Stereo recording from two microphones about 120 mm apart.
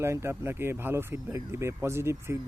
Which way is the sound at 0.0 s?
20° right (ahead or behind).